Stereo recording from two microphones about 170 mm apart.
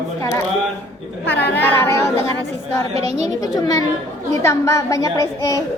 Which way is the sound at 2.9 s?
35° right (ahead or behind).